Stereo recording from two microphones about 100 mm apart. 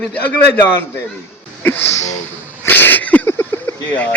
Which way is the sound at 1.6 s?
20° left (ahead or behind).